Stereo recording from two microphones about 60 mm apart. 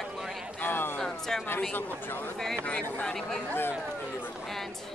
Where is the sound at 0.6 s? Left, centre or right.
Left.